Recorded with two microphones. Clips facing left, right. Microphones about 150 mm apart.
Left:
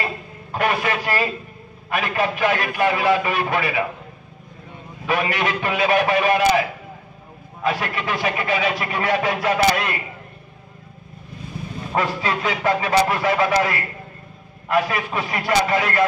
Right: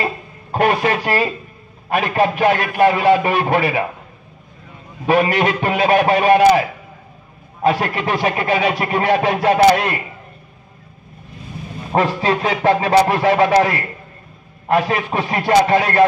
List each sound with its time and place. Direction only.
0.0 s a sound: 35° right (ahead or behind)
1.9 s speech: 40° right (ahead or behind)
5.0 s a man's voice: 35° right (ahead or behind)
7.6 s speech: 35° right (ahead or behind)
11.9 s speech: 35° right (ahead or behind)